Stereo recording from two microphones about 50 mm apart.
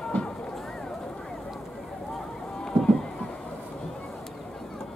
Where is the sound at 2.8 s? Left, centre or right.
Centre.